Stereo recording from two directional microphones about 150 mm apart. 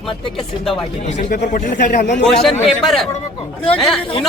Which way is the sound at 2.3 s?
Centre (ahead or behind).